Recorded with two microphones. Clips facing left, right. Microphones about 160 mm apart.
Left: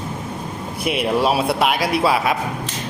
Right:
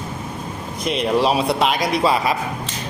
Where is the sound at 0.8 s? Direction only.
10° left (ahead or behind).